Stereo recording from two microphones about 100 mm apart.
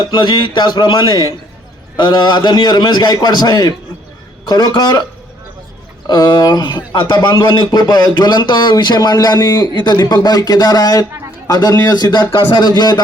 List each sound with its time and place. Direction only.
0.1 s a man's voice: 50° left (ahead or behind)
6.1 s a man's voice: 45° left (ahead or behind)